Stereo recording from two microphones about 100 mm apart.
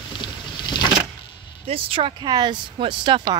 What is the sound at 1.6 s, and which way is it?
Speech, 65° right (ahead or behind).